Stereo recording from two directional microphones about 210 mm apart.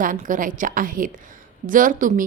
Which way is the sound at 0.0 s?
40° right (ahead or behind).